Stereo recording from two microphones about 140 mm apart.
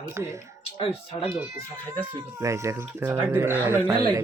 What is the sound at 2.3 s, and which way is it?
Speech, 20° right (ahead or behind).